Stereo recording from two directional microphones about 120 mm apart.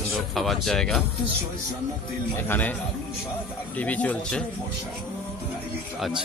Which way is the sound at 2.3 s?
15° left (ahead or behind).